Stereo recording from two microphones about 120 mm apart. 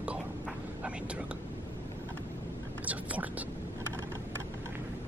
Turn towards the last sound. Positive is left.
turn(degrees=-10)  # may be behind; listen again after turning